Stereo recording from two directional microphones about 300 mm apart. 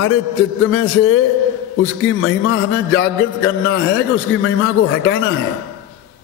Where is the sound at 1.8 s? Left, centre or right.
Left.